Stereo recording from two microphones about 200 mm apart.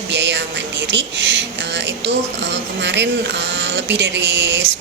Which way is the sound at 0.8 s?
65° right (ahead or behind).